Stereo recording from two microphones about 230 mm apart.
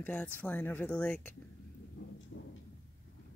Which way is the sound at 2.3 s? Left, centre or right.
Left.